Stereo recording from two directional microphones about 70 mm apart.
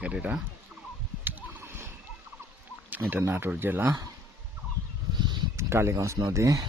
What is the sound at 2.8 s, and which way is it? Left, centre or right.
Speech, right.